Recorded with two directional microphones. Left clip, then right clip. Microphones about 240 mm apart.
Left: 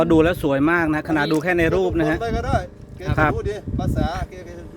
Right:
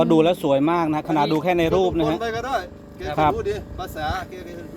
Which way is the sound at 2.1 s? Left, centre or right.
Centre.